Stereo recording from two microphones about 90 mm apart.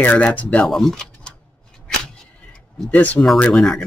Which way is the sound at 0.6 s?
5° left (ahead or behind).